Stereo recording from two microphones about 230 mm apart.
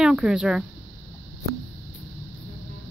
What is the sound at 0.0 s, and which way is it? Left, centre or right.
Speech, centre.